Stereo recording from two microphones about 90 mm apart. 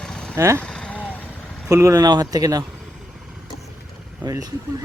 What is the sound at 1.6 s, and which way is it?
Speech, 35° right (ahead or behind).